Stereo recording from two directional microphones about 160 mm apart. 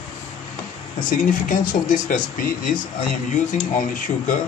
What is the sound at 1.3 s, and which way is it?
Speech, 55° left (ahead or behind).